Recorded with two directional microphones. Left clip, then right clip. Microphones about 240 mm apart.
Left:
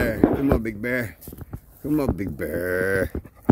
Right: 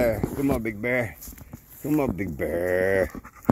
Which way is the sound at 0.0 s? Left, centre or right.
Centre.